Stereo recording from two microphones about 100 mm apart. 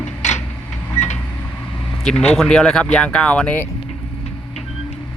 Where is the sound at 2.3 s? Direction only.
5° left (ahead or behind).